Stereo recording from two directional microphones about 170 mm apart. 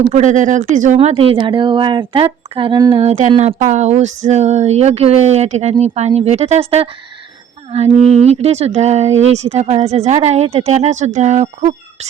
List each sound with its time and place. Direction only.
0.1 s speech: 45° right (ahead or behind)
0.9 s speech: 35° right (ahead or behind)
3.0 s speech: 40° right (ahead or behind)